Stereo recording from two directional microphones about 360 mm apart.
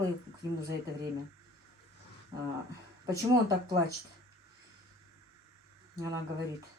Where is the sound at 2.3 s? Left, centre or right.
Centre.